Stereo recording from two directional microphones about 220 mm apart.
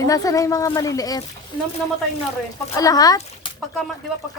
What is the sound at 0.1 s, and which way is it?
Speech, 15° left (ahead or behind).